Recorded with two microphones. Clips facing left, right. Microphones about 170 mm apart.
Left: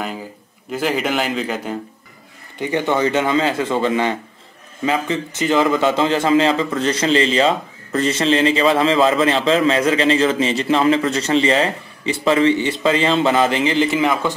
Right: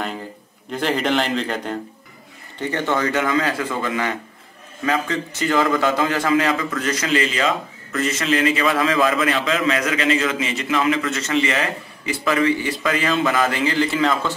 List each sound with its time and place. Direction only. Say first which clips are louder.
0.0 s a man's voice: left 1 dB; 5° left (ahead or behind)
2.6 s a man's voice: left 3 dB; 15° left (ahead or behind)